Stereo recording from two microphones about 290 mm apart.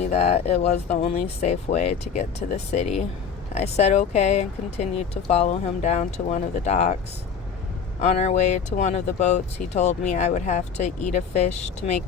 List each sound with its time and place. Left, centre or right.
0.0 s speech: left
8.0 s speech: left